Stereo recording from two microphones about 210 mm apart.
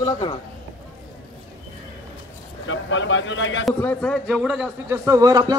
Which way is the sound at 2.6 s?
65° left (ahead or behind).